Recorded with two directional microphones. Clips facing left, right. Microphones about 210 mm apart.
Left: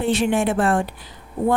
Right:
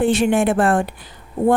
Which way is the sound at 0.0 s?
50° right (ahead or behind).